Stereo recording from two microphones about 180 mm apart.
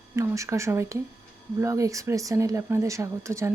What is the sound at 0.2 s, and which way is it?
Speech, 15° right (ahead or behind).